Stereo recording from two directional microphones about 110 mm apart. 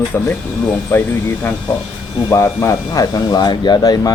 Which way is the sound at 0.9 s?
20° left (ahead or behind).